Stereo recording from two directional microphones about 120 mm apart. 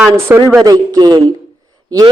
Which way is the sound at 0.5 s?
30° right (ahead or behind).